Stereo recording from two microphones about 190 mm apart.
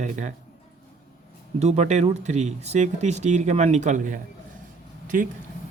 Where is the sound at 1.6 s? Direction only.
35° right (ahead or behind).